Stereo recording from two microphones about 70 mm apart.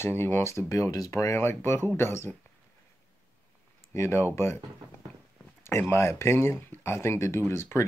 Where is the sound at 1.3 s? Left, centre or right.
Left.